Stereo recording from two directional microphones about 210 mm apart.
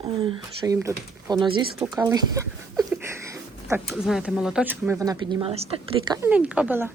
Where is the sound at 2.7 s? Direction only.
15° right (ahead or behind).